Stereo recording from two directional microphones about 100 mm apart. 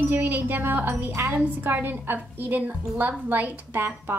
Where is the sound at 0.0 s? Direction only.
20° right (ahead or behind).